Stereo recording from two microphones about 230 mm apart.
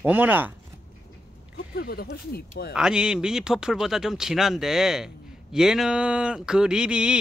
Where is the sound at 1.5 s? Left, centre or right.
Left.